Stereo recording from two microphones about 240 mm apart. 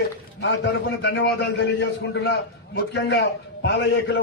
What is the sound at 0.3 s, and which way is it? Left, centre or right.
A man's voice, left.